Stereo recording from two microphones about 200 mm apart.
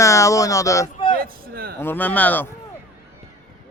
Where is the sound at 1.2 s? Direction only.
50° right (ahead or behind).